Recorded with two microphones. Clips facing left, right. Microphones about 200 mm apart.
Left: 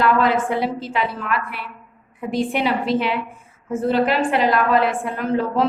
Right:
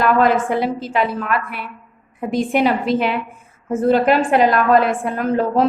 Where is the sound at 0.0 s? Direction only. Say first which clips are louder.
Right 2 dB; 45° right (ahead or behind).